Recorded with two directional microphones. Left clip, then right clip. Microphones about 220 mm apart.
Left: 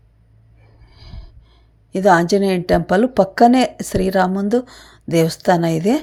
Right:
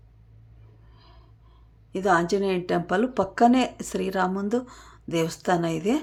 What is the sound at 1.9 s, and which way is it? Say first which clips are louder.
Speech: left 9 dB; 30° left (ahead or behind).